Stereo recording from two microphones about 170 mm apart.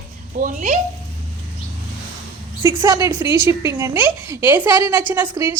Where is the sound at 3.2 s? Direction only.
25° left (ahead or behind).